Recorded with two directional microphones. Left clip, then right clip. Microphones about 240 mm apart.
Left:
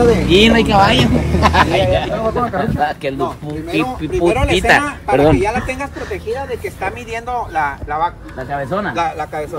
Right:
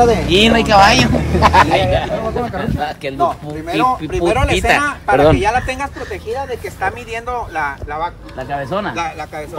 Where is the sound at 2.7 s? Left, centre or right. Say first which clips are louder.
Left 2 dB; centre.